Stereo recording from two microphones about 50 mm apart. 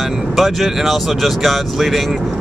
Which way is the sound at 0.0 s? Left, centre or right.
Centre.